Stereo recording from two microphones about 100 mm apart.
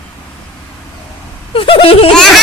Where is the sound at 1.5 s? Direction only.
65° left (ahead or behind).